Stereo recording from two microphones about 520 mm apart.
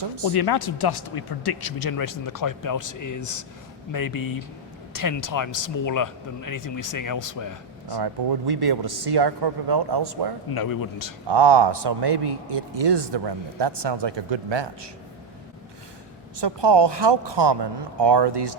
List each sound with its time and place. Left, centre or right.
0.3 s speech: left
7.9 s a man's voice: right
10.5 s speech: left
11.3 s a man's voice: right
16.4 s a man's voice: right